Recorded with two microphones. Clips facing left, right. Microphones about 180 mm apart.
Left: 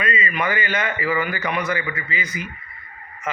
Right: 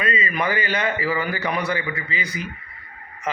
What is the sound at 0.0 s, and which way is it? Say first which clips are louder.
A man's voice: even; 35° right (ahead or behind).